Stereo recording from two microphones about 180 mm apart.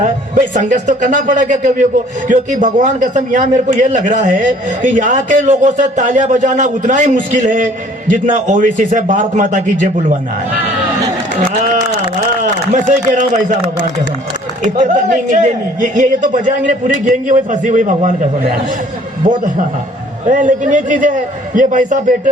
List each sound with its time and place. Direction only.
0.0 s speech: 45° right (ahead or behind)
11.3 s a man's voice: 45° right (ahead or behind)
14.8 s speech: 45° right (ahead or behind)